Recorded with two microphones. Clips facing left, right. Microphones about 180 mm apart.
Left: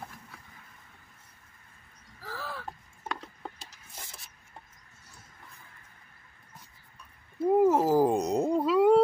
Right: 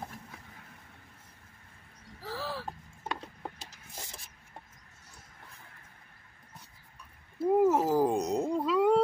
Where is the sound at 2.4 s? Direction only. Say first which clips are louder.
Right 2 dB; 30° right (ahead or behind).